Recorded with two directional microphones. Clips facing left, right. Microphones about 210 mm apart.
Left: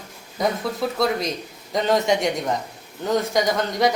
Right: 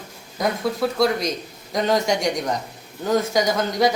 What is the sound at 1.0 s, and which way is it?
Speech, centre (ahead or behind).